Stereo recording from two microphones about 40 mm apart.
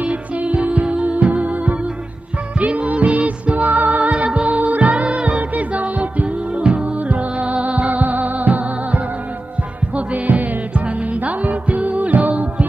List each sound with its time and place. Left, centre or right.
0.0 s music: right